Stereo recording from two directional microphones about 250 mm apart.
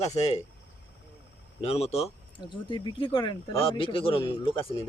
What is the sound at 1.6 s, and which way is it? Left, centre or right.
Speech, left.